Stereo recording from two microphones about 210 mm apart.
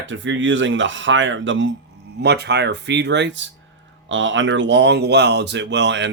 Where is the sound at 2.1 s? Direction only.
50° right (ahead or behind).